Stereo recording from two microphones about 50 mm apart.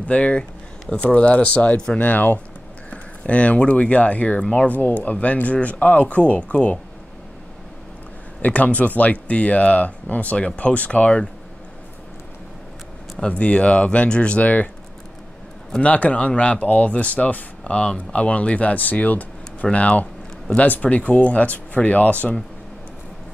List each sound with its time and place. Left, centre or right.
0.0 s speech: left
2.9 s speech: left
8.4 s speech: left
13.2 s speech: left
15.8 s speech: left